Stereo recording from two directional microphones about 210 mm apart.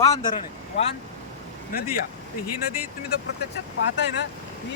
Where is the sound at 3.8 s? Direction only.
55° left (ahead or behind).